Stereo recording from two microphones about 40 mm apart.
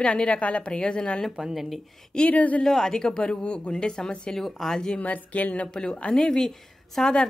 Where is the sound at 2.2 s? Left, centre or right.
Left.